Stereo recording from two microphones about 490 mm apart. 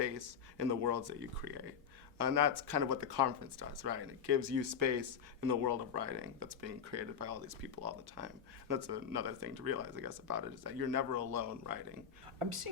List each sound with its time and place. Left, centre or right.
0.0 s speech: right
5.4 s speech: right
12.4 s speech: right